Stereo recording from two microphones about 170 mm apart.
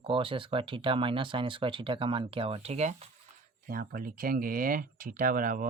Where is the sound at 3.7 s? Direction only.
55° right (ahead or behind).